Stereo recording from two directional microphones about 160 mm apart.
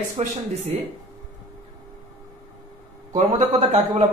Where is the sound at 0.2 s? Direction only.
40° right (ahead or behind).